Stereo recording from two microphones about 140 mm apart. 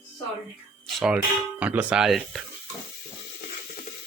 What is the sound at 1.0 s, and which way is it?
Speech, 10° right (ahead or behind).